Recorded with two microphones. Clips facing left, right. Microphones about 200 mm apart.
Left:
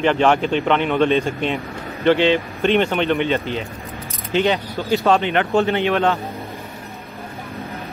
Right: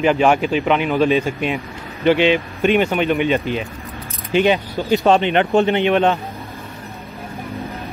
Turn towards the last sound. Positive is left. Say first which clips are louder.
# right 3 dB
turn(degrees=-15)  # may be behind; listen again after turning